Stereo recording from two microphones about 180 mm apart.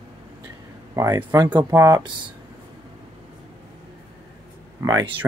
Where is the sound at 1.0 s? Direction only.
20° right (ahead or behind).